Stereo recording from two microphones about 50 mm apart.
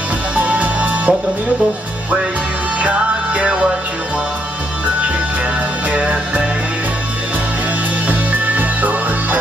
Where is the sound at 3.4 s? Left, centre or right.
Centre.